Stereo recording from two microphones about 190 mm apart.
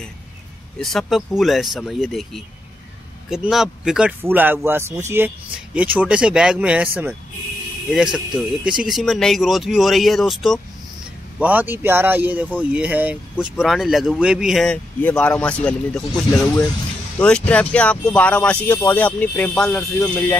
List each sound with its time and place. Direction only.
0.7 s speech: centre (ahead or behind)
17.2 s speech: 5° left (ahead or behind)